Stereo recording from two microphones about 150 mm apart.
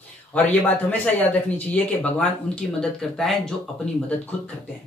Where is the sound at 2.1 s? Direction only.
5° left (ahead or behind).